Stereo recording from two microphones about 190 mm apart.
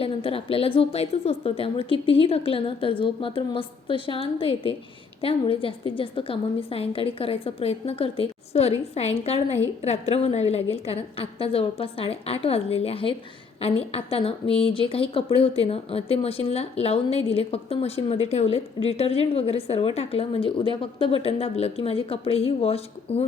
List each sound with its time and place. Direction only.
0.0 s a woman's voice: 30° left (ahead or behind)